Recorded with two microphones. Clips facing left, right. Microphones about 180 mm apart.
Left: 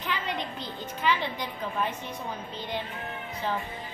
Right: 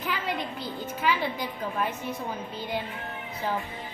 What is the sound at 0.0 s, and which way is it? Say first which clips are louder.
A woman's voice: right 1 dB; 5° right (ahead or behind).